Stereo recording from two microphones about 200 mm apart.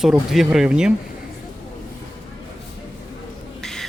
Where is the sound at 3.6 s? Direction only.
Centre (ahead or behind).